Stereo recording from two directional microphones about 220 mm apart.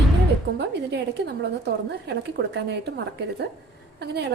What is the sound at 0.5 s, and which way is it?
A woman's voice, 50° right (ahead or behind).